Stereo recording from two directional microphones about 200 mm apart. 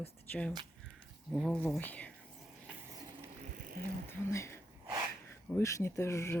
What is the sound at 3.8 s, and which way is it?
Speech, 45° right (ahead or behind).